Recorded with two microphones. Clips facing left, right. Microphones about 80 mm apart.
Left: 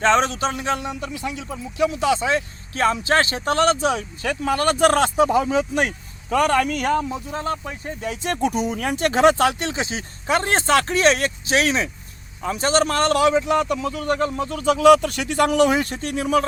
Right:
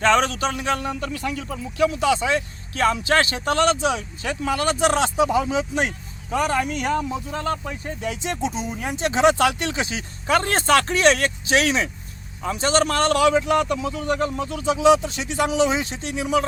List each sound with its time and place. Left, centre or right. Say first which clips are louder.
0.0 s speech: left 1 dB; left
0.9 s speech: right 1 dB; centre; by 6.7 s left
6.7 s speech: left 2 dB; left
7.0 s speech: even; left
8.2 s speech: left 7 dB; left
9.4 s speech: left 1 dB; left